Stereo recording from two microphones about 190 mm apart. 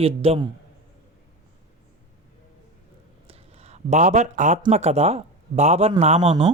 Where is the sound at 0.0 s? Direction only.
30° right (ahead or behind).